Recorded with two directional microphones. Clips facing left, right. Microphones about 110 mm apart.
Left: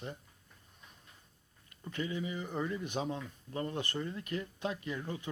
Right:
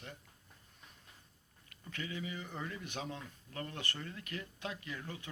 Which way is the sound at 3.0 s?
30° left (ahead or behind).